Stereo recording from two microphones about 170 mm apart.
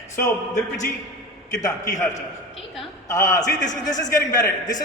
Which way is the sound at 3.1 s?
20° left (ahead or behind).